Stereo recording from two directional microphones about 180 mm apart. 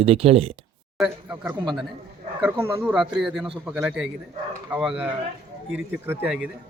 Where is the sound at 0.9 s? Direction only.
5° right (ahead or behind).